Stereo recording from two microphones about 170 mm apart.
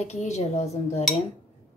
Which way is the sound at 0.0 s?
40° left (ahead or behind).